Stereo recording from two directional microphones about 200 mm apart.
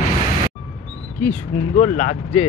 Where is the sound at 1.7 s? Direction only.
40° left (ahead or behind).